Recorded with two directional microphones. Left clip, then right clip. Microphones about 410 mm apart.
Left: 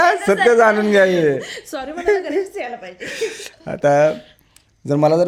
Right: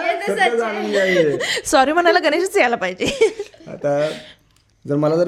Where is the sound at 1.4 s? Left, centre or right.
Right.